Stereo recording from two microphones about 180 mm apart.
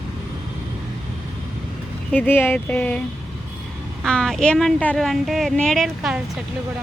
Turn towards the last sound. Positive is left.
turn(degrees=0)  # may be behind; listen again after turning